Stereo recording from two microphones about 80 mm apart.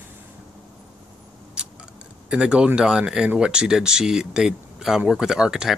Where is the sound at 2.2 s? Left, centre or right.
Centre.